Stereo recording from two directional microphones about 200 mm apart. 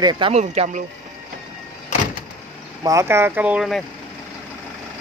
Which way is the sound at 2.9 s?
15° right (ahead or behind).